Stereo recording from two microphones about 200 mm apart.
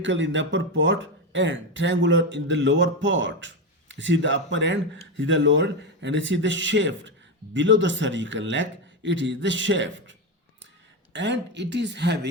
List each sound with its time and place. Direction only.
0.0 s speech: 65° right (ahead or behind)